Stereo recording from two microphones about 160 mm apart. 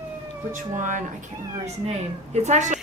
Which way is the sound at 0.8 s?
50° right (ahead or behind).